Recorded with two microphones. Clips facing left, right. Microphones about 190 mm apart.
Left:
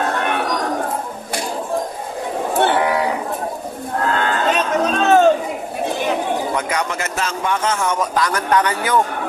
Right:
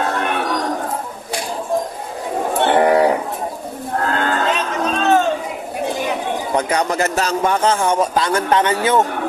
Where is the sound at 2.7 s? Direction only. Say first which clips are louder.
Right 5 dB; 50° right (ahead or behind).